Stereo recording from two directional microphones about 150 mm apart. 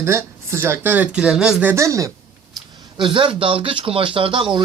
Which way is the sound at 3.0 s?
35° right (ahead or behind).